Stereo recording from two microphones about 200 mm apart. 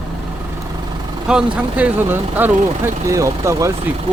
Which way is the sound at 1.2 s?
5° right (ahead or behind).